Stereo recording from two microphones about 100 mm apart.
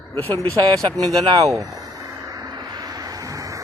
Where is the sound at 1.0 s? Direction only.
40° right (ahead or behind).